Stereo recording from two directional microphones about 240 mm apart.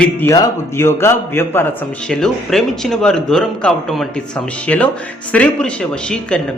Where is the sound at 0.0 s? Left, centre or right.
Centre.